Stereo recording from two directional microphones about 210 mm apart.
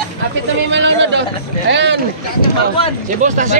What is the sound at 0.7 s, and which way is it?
A man's voice, 60° right (ahead or behind).